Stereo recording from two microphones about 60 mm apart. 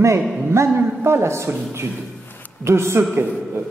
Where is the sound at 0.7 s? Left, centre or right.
Right.